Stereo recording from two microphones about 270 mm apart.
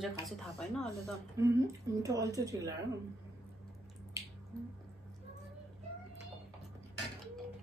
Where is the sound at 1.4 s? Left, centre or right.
Centre.